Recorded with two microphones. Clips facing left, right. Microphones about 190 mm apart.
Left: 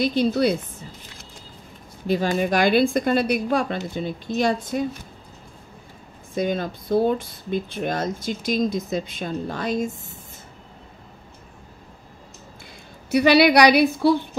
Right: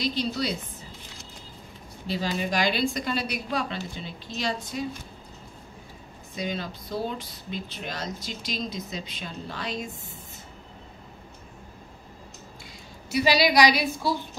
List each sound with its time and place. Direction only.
0.0 s speech: 55° left (ahead or behind)
2.0 s speech: 50° left (ahead or behind)
6.3 s speech: 50° left (ahead or behind)
13.1 s a woman's voice: 60° left (ahead or behind)